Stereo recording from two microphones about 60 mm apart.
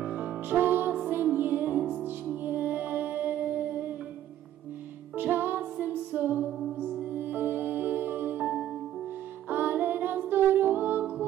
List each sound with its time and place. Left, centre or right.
0.0 s music: right
5.1 s music: right
9.5 s music: right